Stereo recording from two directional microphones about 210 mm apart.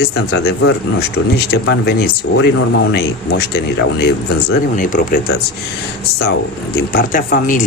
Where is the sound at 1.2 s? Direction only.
60° left (ahead or behind).